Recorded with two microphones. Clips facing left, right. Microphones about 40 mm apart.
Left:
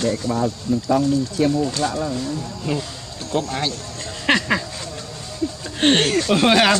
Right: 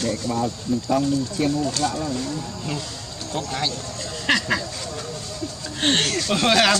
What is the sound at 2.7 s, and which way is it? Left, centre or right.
Speech, centre.